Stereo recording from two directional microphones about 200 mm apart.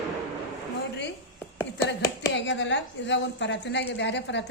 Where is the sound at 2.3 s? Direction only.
65° left (ahead or behind).